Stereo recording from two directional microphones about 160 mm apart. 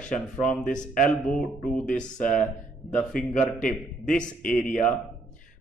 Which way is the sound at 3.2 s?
60° left (ahead or behind).